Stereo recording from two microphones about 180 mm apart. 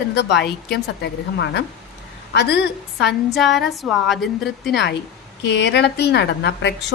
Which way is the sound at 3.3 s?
Centre (ahead or behind).